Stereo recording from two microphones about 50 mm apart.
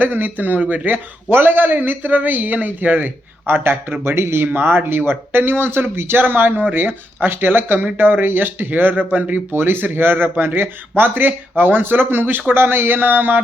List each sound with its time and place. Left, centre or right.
0.0 s a man's voice: right
3.4 s speech: right
4.5 s speech: right